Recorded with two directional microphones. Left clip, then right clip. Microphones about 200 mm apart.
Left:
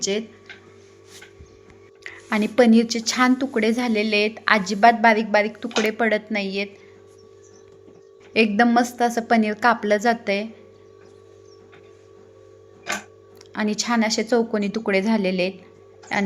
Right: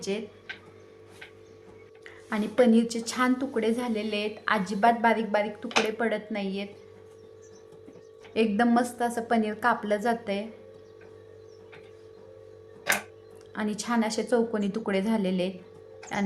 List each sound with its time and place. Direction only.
2.0 s speech: 25° left (ahead or behind)
8.3 s a woman's voice: 20° left (ahead or behind)
13.5 s a woman's voice: 15° left (ahead or behind)